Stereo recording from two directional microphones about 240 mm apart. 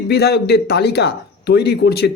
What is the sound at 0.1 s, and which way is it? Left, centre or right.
Speech, left.